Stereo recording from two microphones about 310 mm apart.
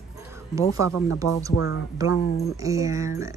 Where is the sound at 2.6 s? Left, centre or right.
Centre.